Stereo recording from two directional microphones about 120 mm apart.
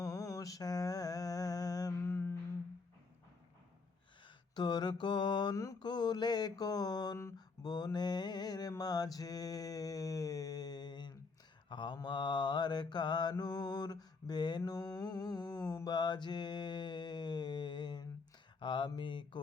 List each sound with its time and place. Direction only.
0.0 s a sound: 30° left (ahead or behind)
2.0 s music: 20° left (ahead or behind)
4.5 s mantra: 35° left (ahead or behind)